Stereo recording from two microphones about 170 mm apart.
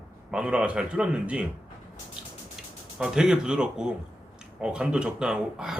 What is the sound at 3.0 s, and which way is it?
Speech, 5° right (ahead or behind).